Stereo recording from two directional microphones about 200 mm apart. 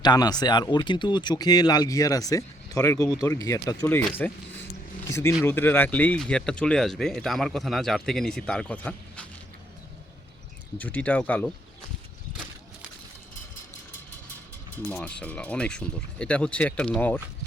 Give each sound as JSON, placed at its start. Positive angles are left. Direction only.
{"t": 0.0, "sound": "speech", "side_deg": 20}
{"t": 10.8, "sound": "speech", "side_deg": 5}
{"t": 14.8, "sound": "speech", "side_deg": 5}